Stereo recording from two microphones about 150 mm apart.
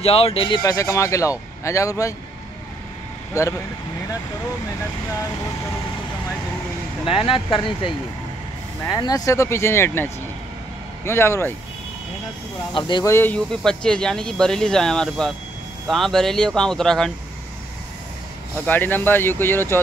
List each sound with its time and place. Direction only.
0.0 s speech: 40° left (ahead or behind)
0.6 s speech: 20° left (ahead or behind)
3.4 s speech: 20° left (ahead or behind)
7.1 s speech: 35° left (ahead or behind)
8.8 s speech: 25° left (ahead or behind)
12.7 s speech: 30° left (ahead or behind)
13.0 s speech: 15° left (ahead or behind)
18.7 s speech: 15° left (ahead or behind)